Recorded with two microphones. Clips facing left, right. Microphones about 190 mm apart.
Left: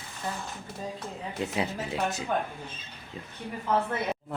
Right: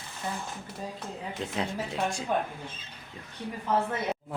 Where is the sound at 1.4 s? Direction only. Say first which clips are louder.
Left 2 dB; 10° left (ahead or behind).